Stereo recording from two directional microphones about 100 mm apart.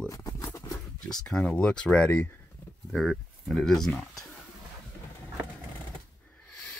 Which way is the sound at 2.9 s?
Centre (ahead or behind).